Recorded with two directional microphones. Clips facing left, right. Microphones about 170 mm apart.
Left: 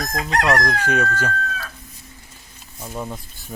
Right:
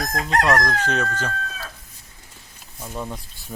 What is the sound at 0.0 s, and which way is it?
Crowing, 35° right (ahead or behind).